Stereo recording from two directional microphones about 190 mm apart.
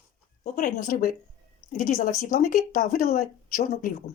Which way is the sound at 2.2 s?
45° left (ahead or behind).